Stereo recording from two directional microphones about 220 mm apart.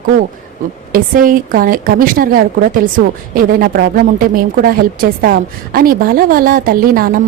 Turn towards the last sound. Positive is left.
turn(degrees=-40)  # may be behind; listen again after turning